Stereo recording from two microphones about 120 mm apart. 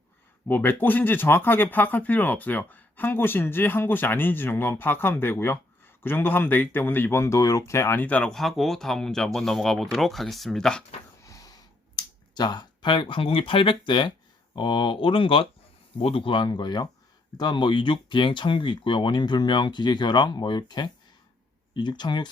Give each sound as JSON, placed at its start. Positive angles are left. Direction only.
{"t": 0.4, "sound": "speech", "side_deg": 15}
{"t": 11.2, "sound": "a sound", "side_deg": 30}
{"t": 14.5, "sound": "speech", "side_deg": 40}